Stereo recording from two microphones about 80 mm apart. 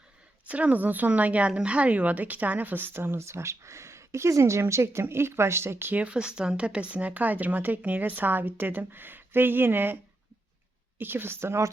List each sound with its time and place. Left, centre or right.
0.4 s speech: centre
6.0 s speech: centre; by 11.7 s right